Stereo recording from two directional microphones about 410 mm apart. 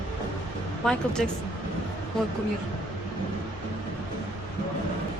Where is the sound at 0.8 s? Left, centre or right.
Centre.